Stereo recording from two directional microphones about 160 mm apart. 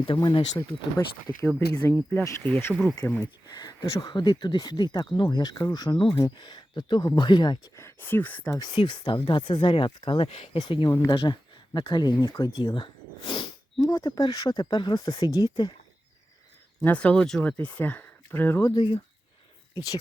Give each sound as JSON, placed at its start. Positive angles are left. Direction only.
{"t": 0.0, "sound": "speech", "side_deg": 30}
{"t": 1.0, "sound": "speech", "side_deg": 15}
{"t": 3.6, "sound": "speech", "side_deg": 25}
{"t": 8.5, "sound": "speech", "side_deg": 30}
{"t": 16.8, "sound": "speech", "side_deg": 10}
{"t": 18.8, "sound": "speech", "side_deg": 30}